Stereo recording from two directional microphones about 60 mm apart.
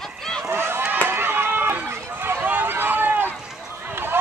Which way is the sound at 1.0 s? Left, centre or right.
Right.